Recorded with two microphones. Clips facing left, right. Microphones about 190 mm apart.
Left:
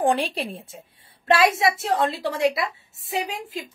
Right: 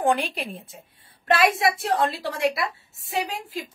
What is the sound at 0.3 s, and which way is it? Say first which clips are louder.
A woman's voice: left 3 dB; 30° left (ahead or behind).